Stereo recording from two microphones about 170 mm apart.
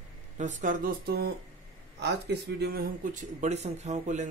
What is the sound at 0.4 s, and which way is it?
Speech, 45° right (ahead or behind).